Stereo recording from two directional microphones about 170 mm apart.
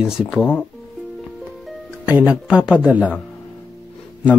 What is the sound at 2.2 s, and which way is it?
Speech, 5° right (ahead or behind).